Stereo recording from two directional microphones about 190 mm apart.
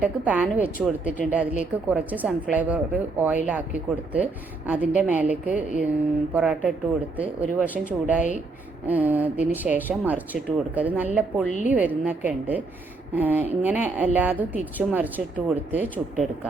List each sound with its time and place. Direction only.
0.0 s a woman's voice: 10° right (ahead or behind)
11.4 s a woman's voice: 40° left (ahead or behind)
11.7 s a woman's voice: 10° right (ahead or behind)